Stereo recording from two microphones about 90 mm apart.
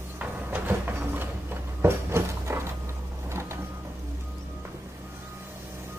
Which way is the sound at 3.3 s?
30° right (ahead or behind).